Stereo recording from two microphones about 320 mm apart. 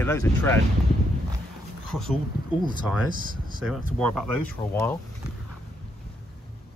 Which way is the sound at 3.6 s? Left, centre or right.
Centre.